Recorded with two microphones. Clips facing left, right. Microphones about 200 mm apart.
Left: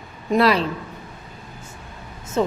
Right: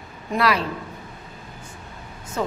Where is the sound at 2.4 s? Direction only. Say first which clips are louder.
Left 5 dB; 25° left (ahead or behind).